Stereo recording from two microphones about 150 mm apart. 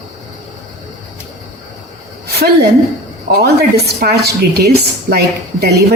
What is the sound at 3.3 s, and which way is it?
Speech, 90° right.